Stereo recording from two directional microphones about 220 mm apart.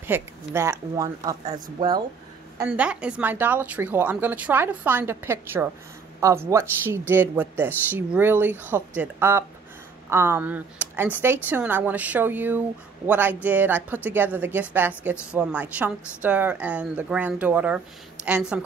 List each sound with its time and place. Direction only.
0.0 s speech: 10° right (ahead or behind)
2.6 s speech: 5° right (ahead or behind)